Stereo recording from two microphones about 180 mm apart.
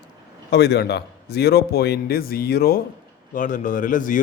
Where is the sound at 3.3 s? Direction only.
45° left (ahead or behind).